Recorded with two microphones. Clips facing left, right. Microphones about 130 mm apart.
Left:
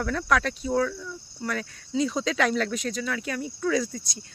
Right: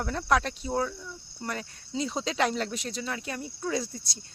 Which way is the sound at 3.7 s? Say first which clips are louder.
Left 4 dB; 90° left.